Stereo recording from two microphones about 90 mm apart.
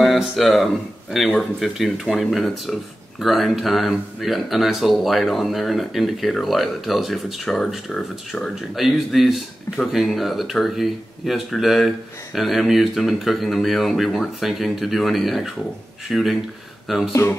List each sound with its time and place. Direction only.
0.0 s speech: centre (ahead or behind)
17.1 s speech: 30° left (ahead or behind)